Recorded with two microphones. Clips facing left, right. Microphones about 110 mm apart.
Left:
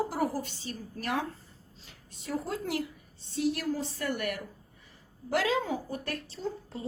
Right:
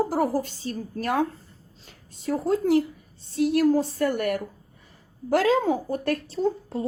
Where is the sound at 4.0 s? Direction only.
35° right (ahead or behind).